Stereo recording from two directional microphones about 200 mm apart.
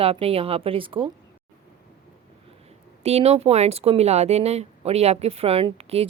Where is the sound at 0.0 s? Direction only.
30° right (ahead or behind).